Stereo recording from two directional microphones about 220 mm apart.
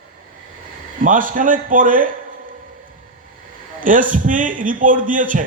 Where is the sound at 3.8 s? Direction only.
35° right (ahead or behind).